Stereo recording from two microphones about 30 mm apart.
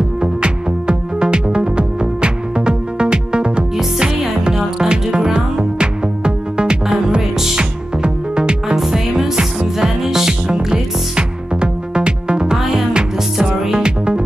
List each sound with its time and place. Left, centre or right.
0.2 s music: right
8.7 s music: centre; by 14.2 s right